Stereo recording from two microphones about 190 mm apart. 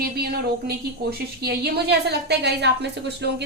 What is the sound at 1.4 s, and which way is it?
A woman's voice, 60° right (ahead or behind).